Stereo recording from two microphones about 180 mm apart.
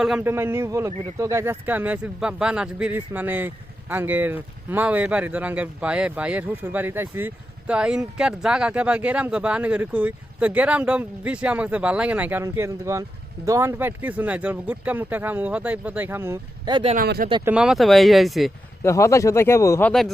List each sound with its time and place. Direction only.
0.0 s a man's voice: 5° right (ahead or behind); by 16.9 s 25° right (ahead or behind)
17.0 s speech: 55° right (ahead or behind)
17.4 s speech: 5° right (ahead or behind)
18.8 s speech: 15° left (ahead or behind)